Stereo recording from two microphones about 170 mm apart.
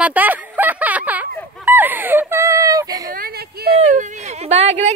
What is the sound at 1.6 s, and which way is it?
Whimper, 10° right (ahead or behind).